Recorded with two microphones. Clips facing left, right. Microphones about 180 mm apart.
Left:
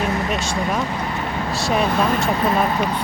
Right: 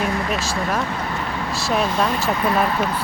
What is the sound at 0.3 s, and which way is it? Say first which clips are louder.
Speech: left 1 dB; centre (ahead or behind).